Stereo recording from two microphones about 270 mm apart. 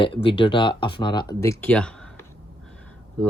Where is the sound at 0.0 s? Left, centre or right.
Centre.